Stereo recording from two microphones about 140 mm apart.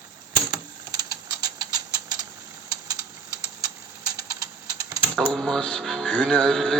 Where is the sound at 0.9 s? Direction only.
25° right (ahead or behind).